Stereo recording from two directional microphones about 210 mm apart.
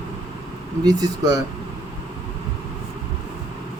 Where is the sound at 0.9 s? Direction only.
20° right (ahead or behind).